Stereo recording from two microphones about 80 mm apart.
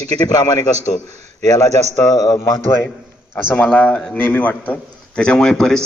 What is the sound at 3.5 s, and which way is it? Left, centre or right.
A man's voice, centre.